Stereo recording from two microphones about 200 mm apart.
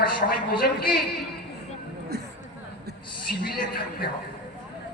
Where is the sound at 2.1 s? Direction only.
55° right (ahead or behind).